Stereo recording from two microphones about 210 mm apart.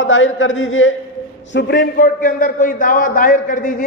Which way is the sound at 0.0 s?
65° left (ahead or behind).